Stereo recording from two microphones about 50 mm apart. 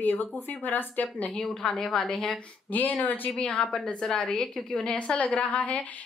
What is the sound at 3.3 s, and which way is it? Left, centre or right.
A woman's voice, left.